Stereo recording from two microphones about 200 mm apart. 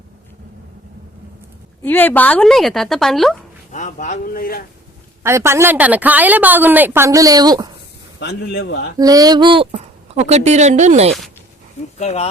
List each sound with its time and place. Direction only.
1.8 s a woman's voice: 10° left (ahead or behind)
3.7 s a man's voice: 35° left (ahead or behind)
5.2 s a woman's voice: 15° right (ahead or behind)
8.2 s a man's voice: 55° left (ahead or behind)
9.0 s speech: 20° right (ahead or behind); by 11.1 s 35° right (ahead or behind)
11.9 s a man's voice: 35° left (ahead or behind)